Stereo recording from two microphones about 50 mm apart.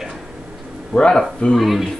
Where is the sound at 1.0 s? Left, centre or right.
Centre.